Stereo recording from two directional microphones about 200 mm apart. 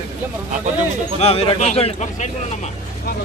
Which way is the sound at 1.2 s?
30° left (ahead or behind).